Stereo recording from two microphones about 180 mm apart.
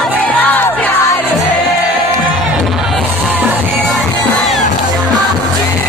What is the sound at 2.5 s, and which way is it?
Music, centre (ahead or behind).